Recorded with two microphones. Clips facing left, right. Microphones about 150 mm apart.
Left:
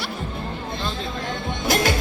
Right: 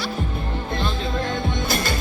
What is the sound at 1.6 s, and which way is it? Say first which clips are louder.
Music: left 9 dB; 90° left.